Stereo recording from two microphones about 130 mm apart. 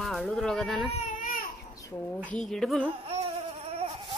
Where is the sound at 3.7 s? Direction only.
50° right (ahead or behind).